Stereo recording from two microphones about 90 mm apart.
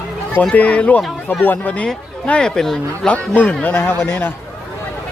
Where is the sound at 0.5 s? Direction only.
15° left (ahead or behind).